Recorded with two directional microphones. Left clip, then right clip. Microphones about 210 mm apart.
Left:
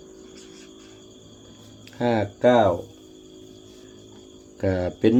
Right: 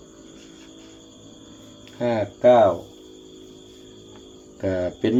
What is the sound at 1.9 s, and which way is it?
Speech, 50° left (ahead or behind).